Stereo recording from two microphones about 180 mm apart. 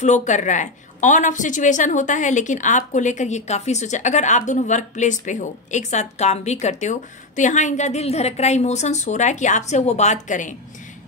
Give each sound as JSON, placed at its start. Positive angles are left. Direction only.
{"t": 0.0, "sound": "a woman's voice", "side_deg": 40}